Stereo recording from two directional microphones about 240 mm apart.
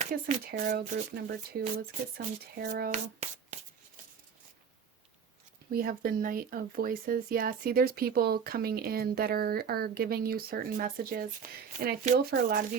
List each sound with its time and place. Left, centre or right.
0.0 s speech: right
5.7 s speech: right